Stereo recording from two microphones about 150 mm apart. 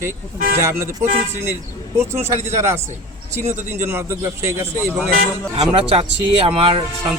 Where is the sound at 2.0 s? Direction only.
15° right (ahead or behind).